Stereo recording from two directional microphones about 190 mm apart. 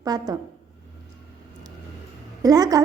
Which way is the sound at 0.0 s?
20° right (ahead or behind).